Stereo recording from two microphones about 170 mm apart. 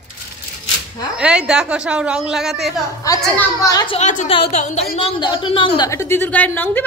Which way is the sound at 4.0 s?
45° left (ahead or behind).